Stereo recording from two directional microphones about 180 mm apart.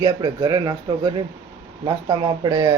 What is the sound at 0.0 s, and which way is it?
Speech, 20° right (ahead or behind).